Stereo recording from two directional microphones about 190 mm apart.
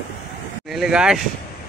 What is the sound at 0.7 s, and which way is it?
Speech, 5° right (ahead or behind).